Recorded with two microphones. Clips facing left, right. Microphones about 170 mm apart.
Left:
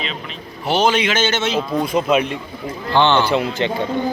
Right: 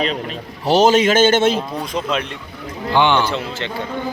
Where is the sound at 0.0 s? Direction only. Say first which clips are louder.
Right 7 dB; 45° right (ahead or behind).